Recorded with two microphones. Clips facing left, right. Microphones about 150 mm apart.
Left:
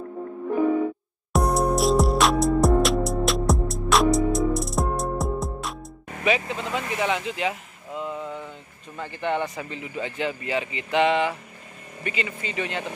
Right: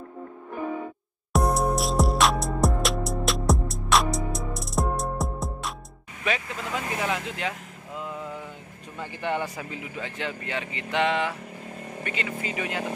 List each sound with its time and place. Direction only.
1.3 s music: centre (ahead or behind)
6.4 s speech: 30° left (ahead or behind)
6.7 s a sound: centre (ahead or behind)
9.0 s speech: 10° right (ahead or behind)